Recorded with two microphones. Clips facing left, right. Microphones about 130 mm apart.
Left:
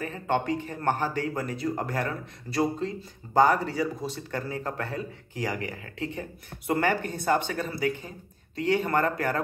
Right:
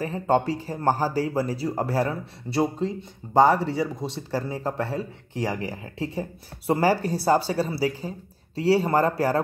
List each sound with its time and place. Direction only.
0.0 s speech: 35° right (ahead or behind)